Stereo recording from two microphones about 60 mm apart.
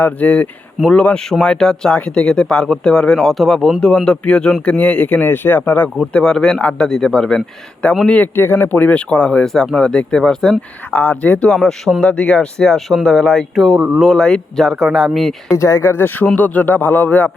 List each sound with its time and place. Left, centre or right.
0.0 s speech: left
5.2 s speech: left
6.1 s speech: centre
8.4 s speech: left; by 10.6 s centre
10.9 s speech: left
13.7 s speech: right
14.0 s speech: centre
15.5 s speech: left
16.2 s speech: left